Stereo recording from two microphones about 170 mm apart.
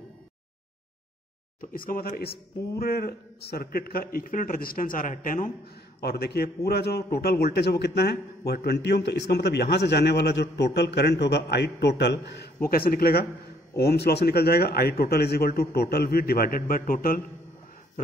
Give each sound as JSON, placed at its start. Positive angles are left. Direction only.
{"t": 1.6, "sound": "a man's voice", "side_deg": 55}
{"t": 6.0, "sound": "a man's voice", "side_deg": 70}
{"t": 12.6, "sound": "a man's voice", "side_deg": 60}